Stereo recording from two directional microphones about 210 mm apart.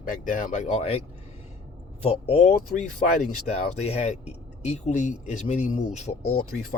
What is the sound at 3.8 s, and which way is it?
Speech, 30° left (ahead or behind).